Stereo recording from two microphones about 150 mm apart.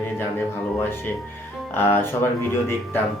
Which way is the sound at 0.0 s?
15° left (ahead or behind).